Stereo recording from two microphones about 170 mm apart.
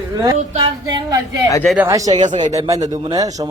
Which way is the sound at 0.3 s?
35° right (ahead or behind).